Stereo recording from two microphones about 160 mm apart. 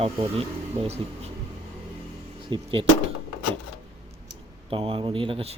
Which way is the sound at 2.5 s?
35° right (ahead or behind).